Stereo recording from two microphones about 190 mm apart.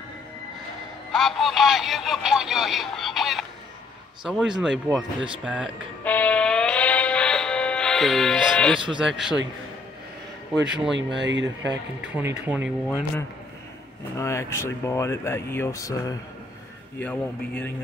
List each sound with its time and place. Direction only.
1.1 s speech: centre (ahead or behind)
6.0 s music: 10° left (ahead or behind)
8.9 s speech: 5° right (ahead or behind)
10.6 s speech: 5° right (ahead or behind)
11.0 s speech: 70° right (ahead or behind)
12.0 s speech: 10° right (ahead or behind)
14.1 s speech: 15° left (ahead or behind)
17.0 s speech: 5° left (ahead or behind)